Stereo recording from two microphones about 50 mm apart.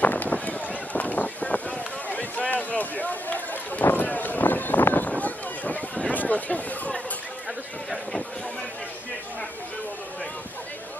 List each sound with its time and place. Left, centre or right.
0.0 s run: left
5.2 s a sound: left
6.1 s speech: left